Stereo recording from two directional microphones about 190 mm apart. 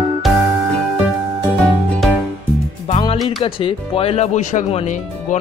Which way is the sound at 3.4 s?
30° left (ahead or behind).